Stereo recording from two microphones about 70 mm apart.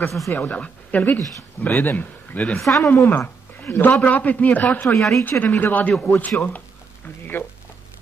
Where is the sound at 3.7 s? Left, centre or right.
Left.